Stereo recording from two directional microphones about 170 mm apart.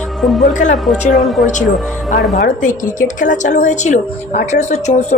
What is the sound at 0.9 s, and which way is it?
Speech, centre (ahead or behind).